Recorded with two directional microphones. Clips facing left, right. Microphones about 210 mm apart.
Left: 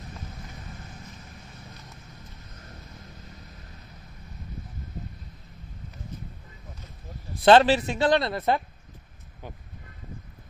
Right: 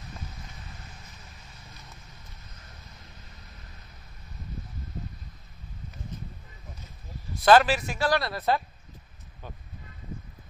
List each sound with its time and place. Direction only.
7.4 s speech: 25° left (ahead or behind)